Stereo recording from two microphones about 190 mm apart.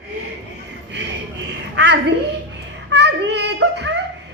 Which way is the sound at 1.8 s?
60° right (ahead or behind).